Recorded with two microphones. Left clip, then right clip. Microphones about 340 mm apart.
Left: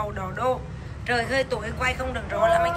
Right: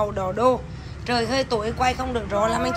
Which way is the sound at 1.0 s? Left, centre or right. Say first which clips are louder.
Right 1 dB; centre.